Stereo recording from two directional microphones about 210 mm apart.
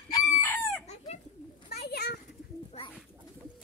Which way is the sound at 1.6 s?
50° left (ahead or behind).